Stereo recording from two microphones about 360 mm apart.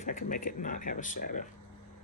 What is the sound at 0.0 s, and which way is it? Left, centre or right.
Speech, left.